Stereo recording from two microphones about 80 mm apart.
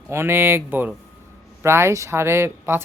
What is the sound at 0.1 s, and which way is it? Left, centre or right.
Speech, right.